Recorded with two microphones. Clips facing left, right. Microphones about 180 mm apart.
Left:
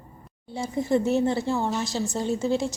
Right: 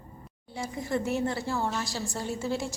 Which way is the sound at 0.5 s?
25° left (ahead or behind).